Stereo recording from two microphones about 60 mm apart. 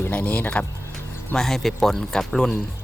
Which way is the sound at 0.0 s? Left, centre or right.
Left.